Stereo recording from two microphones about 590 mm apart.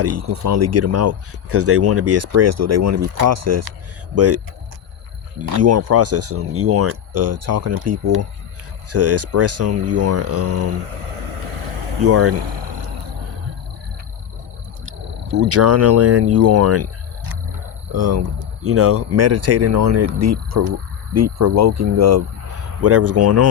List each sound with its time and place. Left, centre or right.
0.0 s speech: right
5.4 s speech: right
10.8 s vehicle: right
12.0 s speech: right
14.8 s speech: right